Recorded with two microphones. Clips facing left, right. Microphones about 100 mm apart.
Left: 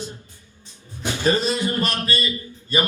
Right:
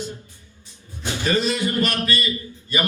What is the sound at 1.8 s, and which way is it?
Speech, 25° left (ahead or behind).